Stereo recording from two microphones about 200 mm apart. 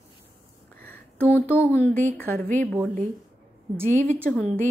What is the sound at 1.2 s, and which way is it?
A woman's voice, 10° left (ahead or behind).